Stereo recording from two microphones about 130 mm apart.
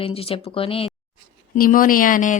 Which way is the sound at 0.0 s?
45° left (ahead or behind).